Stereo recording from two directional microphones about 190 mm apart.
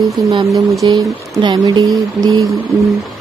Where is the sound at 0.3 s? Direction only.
20° right (ahead or behind).